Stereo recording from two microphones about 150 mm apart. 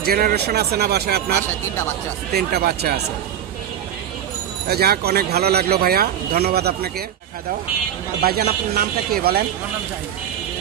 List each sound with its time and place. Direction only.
0.0 s speech: 90° right
4.6 s speech: 90° right
8.2 s speech: 90° right